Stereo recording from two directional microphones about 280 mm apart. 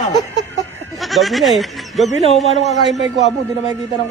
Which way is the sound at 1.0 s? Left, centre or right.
Centre.